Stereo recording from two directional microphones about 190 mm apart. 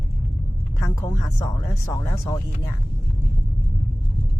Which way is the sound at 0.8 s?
15° left (ahead or behind).